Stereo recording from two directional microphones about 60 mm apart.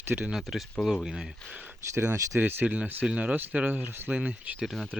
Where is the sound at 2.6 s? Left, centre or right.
Centre; by 4.1 s right.